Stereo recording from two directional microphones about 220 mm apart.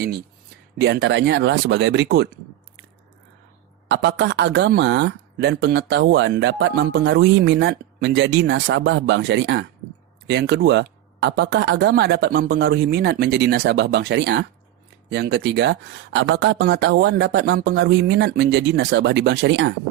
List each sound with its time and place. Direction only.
0.8 s speech: 55° right (ahead or behind)
3.8 s speech: 50° right (ahead or behind)